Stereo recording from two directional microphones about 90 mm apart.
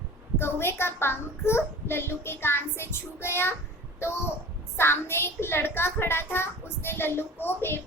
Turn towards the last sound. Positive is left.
turn(degrees=25)  # may be behind; listen again after turning